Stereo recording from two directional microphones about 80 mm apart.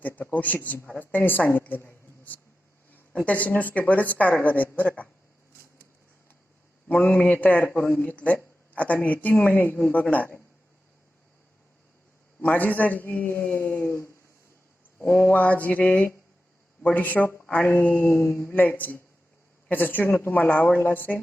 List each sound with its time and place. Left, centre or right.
0.0 s a man's voice: left
6.8 s a man's voice: centre
12.4 s a man's voice: left